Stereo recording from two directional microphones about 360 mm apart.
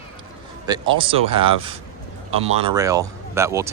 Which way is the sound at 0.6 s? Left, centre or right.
Centre.